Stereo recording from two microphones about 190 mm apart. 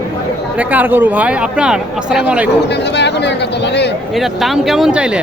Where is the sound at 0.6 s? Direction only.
10° right (ahead or behind).